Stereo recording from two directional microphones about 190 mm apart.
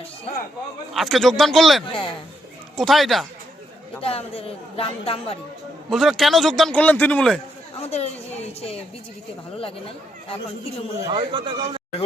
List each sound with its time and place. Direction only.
0.9 s a man's voice: centre (ahead or behind)
1.9 s speech: 25° left (ahead or behind)
2.7 s a man's voice: centre (ahead or behind)
4.0 s speech: 30° left (ahead or behind)
5.9 s a man's voice: centre (ahead or behind)
7.8 s speech: 35° left (ahead or behind)
11.0 s speech: 25° right (ahead or behind)